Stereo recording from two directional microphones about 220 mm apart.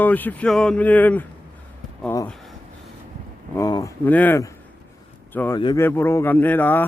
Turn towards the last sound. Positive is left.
turn(degrees=10)  # may be behind; listen again after turning